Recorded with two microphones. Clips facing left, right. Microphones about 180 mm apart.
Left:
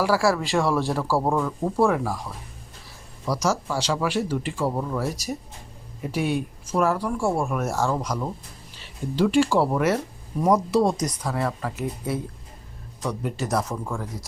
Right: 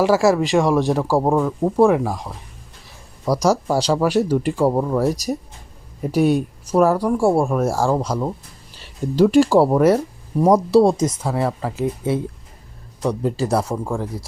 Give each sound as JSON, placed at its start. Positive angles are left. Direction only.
{"t": 0.0, "sound": "speech", "side_deg": -20}
{"t": 3.2, "sound": "speech", "side_deg": -35}
{"t": 9.1, "sound": "speech", "side_deg": -40}